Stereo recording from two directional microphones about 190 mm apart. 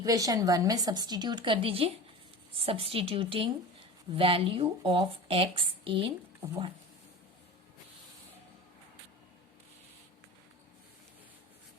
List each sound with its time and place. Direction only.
0.0 s speech: 20° right (ahead or behind)